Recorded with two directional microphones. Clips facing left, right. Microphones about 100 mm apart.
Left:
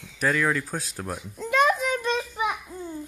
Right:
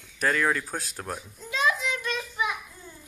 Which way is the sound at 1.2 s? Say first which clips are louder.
Left 6 dB; 70° left (ahead or behind).